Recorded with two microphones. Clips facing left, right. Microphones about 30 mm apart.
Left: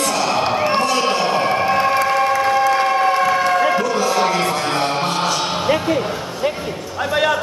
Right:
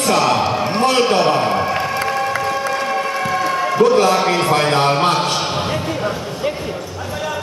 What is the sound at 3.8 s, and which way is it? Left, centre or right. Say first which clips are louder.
Music: right 6 dB; right.